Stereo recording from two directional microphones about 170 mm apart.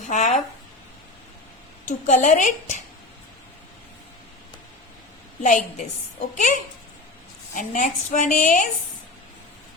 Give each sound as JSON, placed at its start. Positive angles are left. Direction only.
{"t": 0.1, "sound": "a woman's voice", "side_deg": 45}
{"t": 1.9, "sound": "a woman's voice", "side_deg": 45}
{"t": 5.4, "sound": "a woman's voice", "side_deg": 50}